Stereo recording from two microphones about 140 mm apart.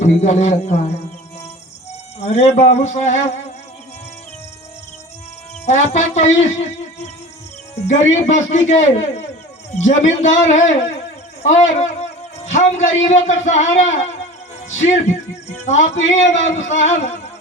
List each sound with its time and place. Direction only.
0.0 s a man's voice: 55° left (ahead or behind)
2.3 s a man's voice: 50° left (ahead or behind)
5.6 s a man's voice: 55° left (ahead or behind)
7.9 s a man's voice: 55° left (ahead or behind)
15.6 s a man's voice: 55° left (ahead or behind)